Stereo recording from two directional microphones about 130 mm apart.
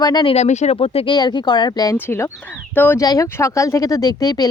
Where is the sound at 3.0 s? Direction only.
25° left (ahead or behind).